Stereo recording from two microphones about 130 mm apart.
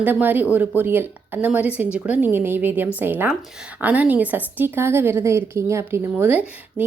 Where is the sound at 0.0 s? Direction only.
15° right (ahead or behind).